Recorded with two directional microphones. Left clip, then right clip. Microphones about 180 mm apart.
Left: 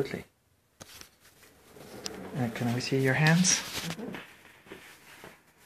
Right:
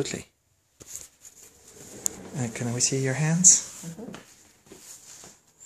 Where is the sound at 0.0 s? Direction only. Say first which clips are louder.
Right 2 dB; 40° right (ahead or behind).